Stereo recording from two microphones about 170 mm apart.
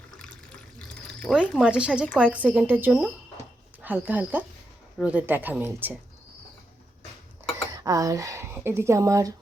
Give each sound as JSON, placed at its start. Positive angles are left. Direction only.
{"t": 0.2, "sound": "water", "side_deg": 5}
{"t": 1.6, "sound": "speech", "side_deg": -5}
{"t": 7.8, "sound": "speech", "side_deg": -20}